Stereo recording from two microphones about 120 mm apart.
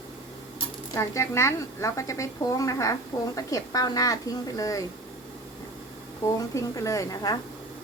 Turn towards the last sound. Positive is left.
turn(degrees=30)  # may be behind; listen again after turning